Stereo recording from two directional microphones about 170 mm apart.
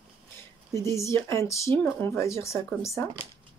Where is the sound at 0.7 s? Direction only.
15° left (ahead or behind).